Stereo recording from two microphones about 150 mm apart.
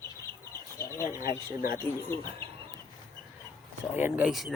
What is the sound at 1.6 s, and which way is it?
Speech, 75° left (ahead or behind).